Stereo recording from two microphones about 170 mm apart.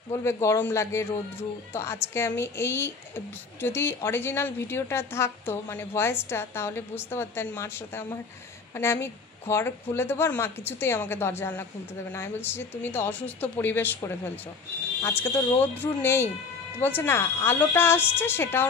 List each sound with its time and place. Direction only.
0.2 s a woman's voice: 15° left (ahead or behind)